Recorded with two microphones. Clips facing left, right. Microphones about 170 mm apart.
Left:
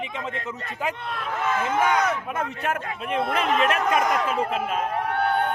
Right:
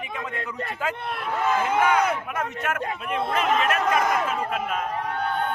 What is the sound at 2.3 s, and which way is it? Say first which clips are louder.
A man's voice: left 1 dB; 30° left (ahead or behind).